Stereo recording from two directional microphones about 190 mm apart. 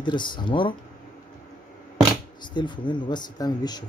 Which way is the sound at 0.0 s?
25° left (ahead or behind).